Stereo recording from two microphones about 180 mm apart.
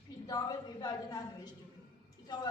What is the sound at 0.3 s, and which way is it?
Speech, 20° left (ahead or behind).